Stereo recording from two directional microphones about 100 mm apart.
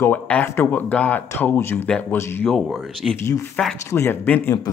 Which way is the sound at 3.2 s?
25° left (ahead or behind).